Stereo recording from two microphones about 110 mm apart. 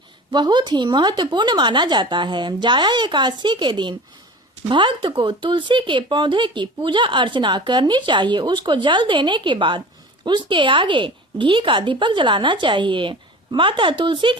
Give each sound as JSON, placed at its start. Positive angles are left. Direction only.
{"t": 0.3, "sound": "speech", "side_deg": -45}